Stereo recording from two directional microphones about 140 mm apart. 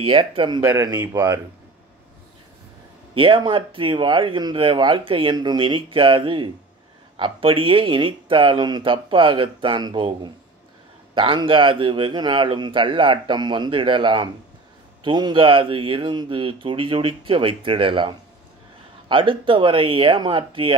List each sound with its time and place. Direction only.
0.0 s speech: 40° right (ahead or behind)
0.6 s speech: 20° right (ahead or behind)
3.2 s speech: 40° right (ahead or behind)